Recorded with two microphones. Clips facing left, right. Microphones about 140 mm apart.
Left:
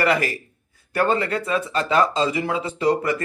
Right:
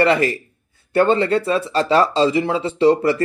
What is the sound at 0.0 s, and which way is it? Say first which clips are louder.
A man's voice: right 5 dB; 25° right (ahead or behind).